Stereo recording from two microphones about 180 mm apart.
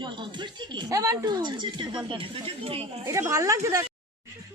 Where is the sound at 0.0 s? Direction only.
25° right (ahead or behind).